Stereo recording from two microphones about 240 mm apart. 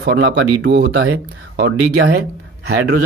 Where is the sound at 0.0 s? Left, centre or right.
Right.